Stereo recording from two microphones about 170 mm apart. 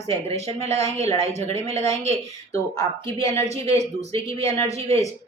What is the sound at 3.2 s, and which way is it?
A woman's voice, 40° right (ahead or behind).